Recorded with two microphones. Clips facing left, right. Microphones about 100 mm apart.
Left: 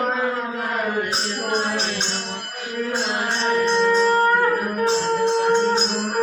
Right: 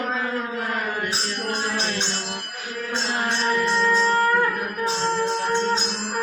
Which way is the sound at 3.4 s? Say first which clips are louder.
Left 4 dB; 20° left (ahead or behind).